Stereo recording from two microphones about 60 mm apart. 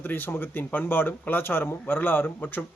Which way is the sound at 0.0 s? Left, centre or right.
Left.